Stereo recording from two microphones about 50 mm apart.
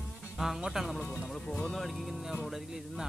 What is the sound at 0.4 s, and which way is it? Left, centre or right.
Speech, centre.